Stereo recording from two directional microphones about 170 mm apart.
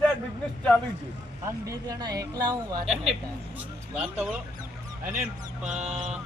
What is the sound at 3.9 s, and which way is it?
Speech, 5° right (ahead or behind).